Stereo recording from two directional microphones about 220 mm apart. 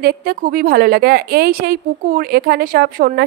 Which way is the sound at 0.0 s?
45° right (ahead or behind).